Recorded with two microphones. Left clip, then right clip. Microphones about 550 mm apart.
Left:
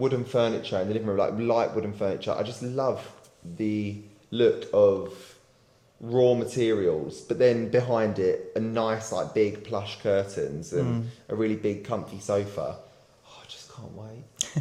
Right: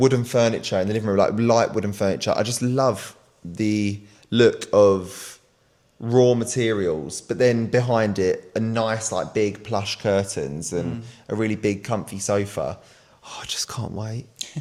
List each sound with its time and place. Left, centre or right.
0.0 s speech: right
6.1 s speech: right
6.4 s speech: right
13.2 s speech: right